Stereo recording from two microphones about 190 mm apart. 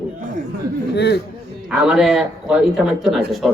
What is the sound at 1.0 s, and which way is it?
Speech, 60° left (ahead or behind).